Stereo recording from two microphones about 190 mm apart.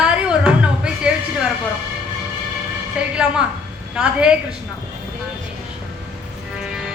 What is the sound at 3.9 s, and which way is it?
Speech, 5° right (ahead or behind).